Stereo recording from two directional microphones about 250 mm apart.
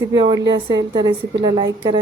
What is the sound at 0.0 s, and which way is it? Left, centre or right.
A woman's voice, centre.